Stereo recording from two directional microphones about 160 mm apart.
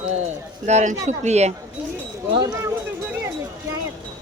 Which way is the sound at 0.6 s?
50° right (ahead or behind).